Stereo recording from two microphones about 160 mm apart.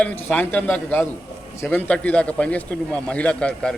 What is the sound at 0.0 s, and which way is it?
Speech, 10° left (ahead or behind).